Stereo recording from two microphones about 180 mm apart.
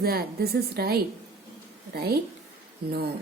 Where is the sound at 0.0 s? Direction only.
60° right (ahead or behind).